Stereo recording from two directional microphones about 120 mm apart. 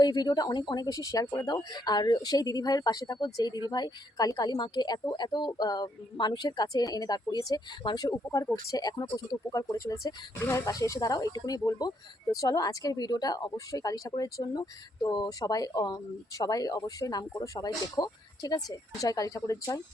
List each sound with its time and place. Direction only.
0.0 s speech: 35° left (ahead or behind)